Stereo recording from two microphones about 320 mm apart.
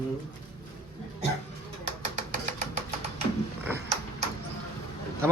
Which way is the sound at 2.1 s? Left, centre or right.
Right.